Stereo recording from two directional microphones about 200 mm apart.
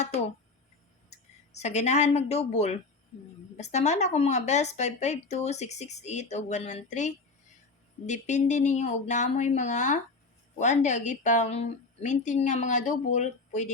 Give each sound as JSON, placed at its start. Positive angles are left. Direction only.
{"t": 1.5, "sound": "speech", "side_deg": 35}